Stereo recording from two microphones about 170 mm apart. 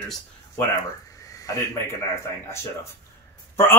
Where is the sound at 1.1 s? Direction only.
20° left (ahead or behind).